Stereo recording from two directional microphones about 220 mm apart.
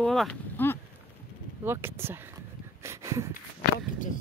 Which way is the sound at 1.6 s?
10° right (ahead or behind).